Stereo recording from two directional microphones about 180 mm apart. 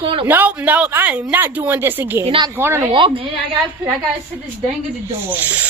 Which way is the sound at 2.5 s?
15° right (ahead or behind).